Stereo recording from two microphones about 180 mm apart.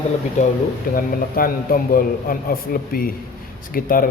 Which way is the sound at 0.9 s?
55° left (ahead or behind).